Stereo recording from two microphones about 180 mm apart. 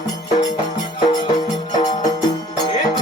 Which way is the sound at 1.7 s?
20° left (ahead or behind).